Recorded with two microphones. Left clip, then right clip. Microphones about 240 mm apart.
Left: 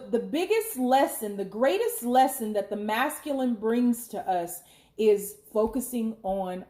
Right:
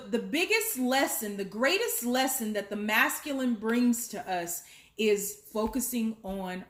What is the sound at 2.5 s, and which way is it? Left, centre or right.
A woman's voice, right.